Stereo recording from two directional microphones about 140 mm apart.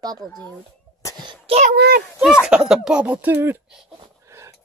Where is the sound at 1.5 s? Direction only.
75° right (ahead or behind).